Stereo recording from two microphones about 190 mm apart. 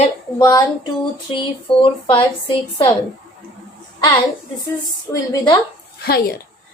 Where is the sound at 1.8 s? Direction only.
25° left (ahead or behind).